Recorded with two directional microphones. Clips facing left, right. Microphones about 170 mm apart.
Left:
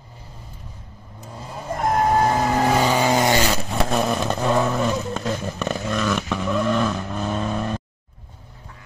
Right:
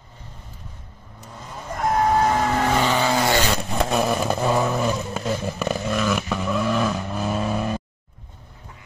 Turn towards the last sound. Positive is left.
turn(degrees=-5)  # may be behind; listen again after turning